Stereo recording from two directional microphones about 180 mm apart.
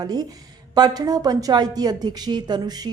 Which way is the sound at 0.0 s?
20° right (ahead or behind).